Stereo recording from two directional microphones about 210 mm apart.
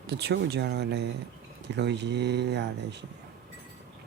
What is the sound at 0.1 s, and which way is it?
Speech, 50° right (ahead or behind).